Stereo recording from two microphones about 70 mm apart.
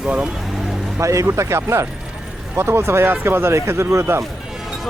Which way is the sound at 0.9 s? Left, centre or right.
Right.